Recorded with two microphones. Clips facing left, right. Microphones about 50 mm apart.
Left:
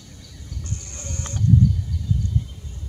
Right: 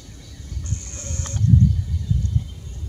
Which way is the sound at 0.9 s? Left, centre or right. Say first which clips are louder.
Left 1 dB; centre.